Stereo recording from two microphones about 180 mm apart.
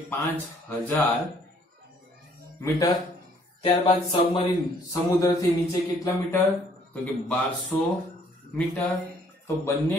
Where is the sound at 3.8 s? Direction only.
25° left (ahead or behind).